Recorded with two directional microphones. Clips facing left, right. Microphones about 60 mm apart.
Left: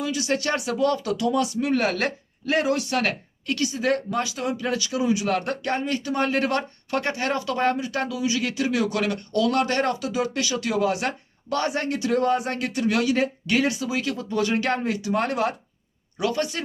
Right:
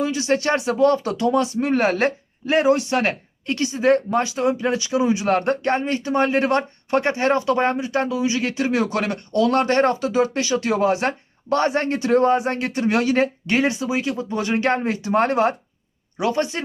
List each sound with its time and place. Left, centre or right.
0.0 s speech: right